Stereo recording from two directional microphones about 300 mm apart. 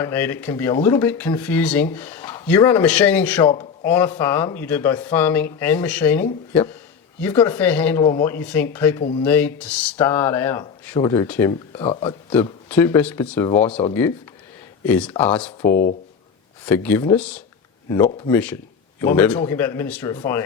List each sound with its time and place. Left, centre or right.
0.0 s speech: centre
12.3 s speech: centre
15.7 s speech: left
16.6 s speech: centre